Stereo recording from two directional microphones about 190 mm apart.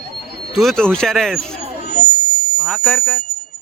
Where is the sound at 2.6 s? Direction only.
5° left (ahead or behind).